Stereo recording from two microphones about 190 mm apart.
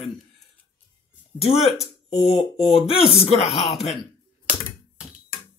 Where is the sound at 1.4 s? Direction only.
30° left (ahead or behind).